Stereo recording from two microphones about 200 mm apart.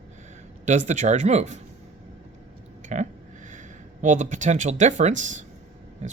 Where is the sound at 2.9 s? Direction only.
40° right (ahead or behind).